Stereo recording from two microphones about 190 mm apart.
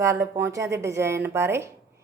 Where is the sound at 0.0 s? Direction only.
15° right (ahead or behind).